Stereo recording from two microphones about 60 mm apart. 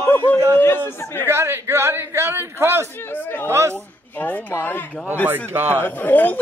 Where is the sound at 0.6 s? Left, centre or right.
Left.